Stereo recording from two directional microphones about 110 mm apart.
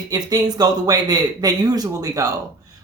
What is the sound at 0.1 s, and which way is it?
Speech, 35° right (ahead or behind).